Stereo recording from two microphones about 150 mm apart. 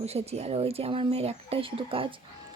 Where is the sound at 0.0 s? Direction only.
45° right (ahead or behind).